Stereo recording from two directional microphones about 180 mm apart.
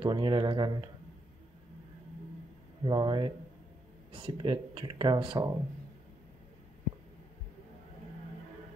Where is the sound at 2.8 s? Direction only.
25° right (ahead or behind).